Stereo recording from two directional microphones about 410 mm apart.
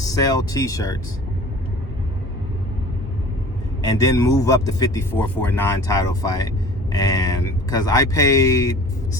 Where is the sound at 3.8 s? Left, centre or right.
Centre.